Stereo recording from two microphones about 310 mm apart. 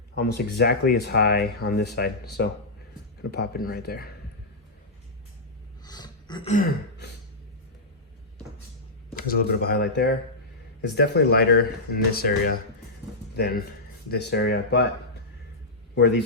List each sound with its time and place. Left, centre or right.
0.1 s speech: left
5.8 s a sound: centre
9.0 s speech: left